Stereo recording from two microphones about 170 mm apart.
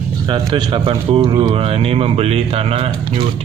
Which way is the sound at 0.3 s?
30° right (ahead or behind).